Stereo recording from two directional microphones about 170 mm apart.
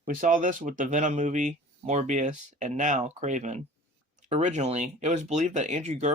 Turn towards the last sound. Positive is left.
turn(degrees=-45)  # may be behind; listen again after turning